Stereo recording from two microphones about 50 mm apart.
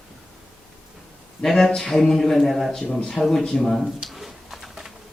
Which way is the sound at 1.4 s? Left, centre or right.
Centre.